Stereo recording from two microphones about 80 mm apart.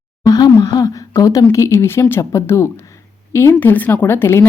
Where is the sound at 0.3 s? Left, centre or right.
Left.